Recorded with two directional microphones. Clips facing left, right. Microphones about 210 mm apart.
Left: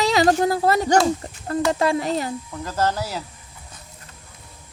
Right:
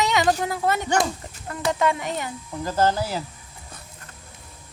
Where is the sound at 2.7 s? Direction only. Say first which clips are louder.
Right 2 dB; 30° right (ahead or behind).